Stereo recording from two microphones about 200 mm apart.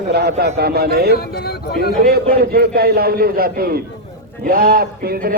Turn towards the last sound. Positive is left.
turn(degrees=-50)  # may be behind; listen again after turning